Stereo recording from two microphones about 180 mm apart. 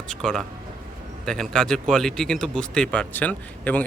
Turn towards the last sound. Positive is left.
turn(degrees=10)  # may be behind; listen again after turning